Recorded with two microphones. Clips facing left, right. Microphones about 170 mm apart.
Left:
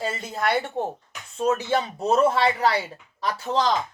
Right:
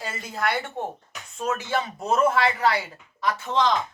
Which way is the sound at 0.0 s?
25° left (ahead or behind).